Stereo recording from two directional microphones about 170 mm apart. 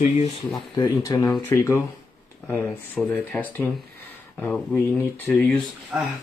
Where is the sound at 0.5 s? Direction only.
20° left (ahead or behind).